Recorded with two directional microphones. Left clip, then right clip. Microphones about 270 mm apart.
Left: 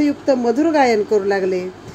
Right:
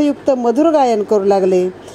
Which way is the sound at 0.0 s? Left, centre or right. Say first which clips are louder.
Right 2 dB; right.